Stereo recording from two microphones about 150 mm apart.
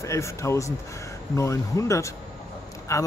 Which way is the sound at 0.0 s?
20° left (ahead or behind).